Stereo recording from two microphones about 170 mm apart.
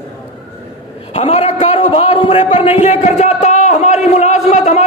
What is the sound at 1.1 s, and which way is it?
A man's voice, 35° left (ahead or behind).